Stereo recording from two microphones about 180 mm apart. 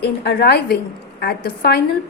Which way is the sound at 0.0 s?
60° left (ahead or behind).